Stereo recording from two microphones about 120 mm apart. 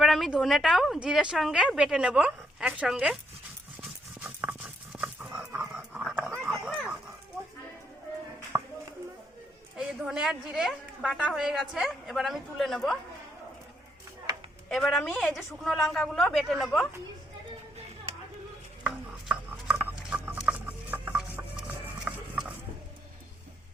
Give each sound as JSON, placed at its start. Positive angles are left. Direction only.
{"t": 0.0, "sound": "speech", "side_deg": 0}
{"t": 3.8, "sound": "livestock", "side_deg": -15}
{"t": 6.4, "sound": "dog", "side_deg": 0}
{"t": 8.5, "sound": "music", "side_deg": -20}
{"t": 9.7, "sound": "a woman's voice", "side_deg": -5}
{"t": 14.7, "sound": "speech", "side_deg": 0}
{"t": 18.8, "sound": "a sound", "side_deg": -10}